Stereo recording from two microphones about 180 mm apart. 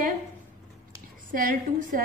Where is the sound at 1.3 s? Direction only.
50° right (ahead or behind).